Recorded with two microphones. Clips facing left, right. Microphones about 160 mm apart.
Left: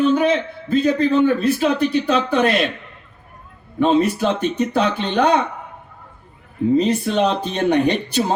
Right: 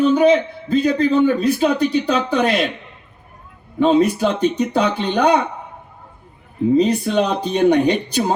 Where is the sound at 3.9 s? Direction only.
15° right (ahead or behind).